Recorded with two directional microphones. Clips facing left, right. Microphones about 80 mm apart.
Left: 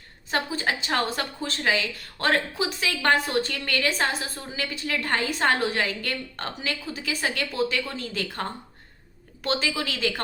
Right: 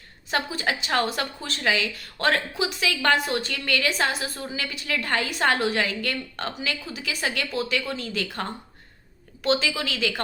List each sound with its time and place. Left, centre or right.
0.3 s a woman's voice: left